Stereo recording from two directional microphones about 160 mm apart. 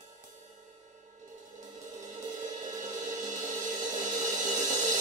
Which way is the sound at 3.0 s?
50° right (ahead or behind).